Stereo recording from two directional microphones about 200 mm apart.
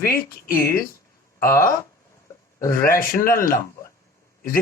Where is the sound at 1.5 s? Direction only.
15° left (ahead or behind).